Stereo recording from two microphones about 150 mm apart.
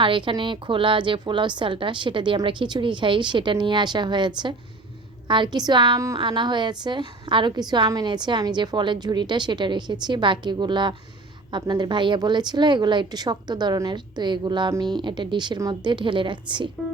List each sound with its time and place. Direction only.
0.0 s a woman's voice: 35° right (ahead or behind)